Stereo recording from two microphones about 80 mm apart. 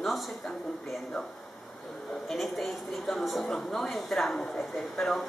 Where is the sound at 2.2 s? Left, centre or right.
Centre.